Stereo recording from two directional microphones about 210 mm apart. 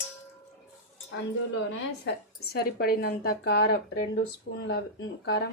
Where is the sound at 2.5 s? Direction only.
50° left (ahead or behind).